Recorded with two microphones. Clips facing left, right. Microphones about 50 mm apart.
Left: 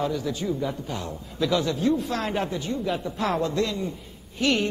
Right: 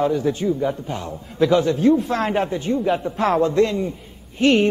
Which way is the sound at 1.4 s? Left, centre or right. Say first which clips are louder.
Right 7 dB; right.